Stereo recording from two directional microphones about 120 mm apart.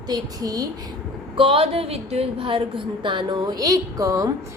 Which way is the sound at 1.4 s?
50° right (ahead or behind).